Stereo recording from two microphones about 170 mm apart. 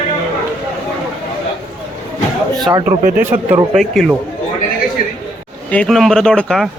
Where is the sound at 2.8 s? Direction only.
50° right (ahead or behind).